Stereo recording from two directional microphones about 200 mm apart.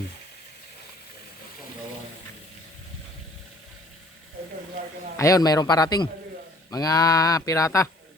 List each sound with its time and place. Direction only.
5.1 s a man's voice: 15° left (ahead or behind)